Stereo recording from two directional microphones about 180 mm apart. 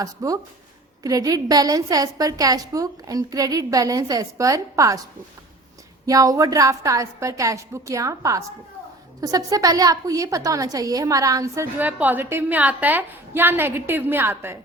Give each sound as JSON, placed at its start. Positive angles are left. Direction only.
{"t": 0.0, "sound": "a woman's voice", "side_deg": -20}
{"t": 6.1, "sound": "a woman's voice", "side_deg": -20}